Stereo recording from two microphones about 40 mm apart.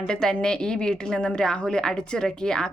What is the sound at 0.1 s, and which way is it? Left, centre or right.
A woman's voice, centre.